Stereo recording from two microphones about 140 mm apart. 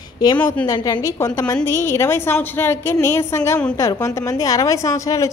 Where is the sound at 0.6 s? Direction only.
30° left (ahead or behind).